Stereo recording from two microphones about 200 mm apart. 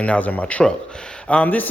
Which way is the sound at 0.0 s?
5° left (ahead or behind).